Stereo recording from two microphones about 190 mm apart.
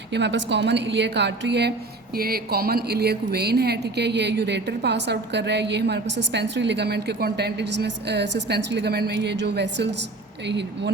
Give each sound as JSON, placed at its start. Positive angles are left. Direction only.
{"t": 0.1, "sound": "a woman's voice", "side_deg": -65}